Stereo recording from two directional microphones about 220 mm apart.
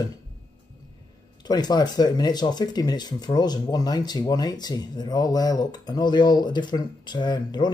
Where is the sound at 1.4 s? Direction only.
20° left (ahead or behind).